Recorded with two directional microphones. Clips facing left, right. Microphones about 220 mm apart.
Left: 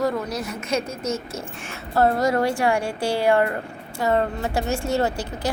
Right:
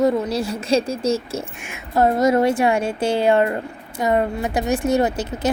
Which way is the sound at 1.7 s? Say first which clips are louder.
Right 2 dB; 15° right (ahead or behind).